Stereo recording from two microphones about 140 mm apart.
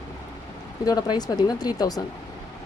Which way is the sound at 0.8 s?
30° left (ahead or behind).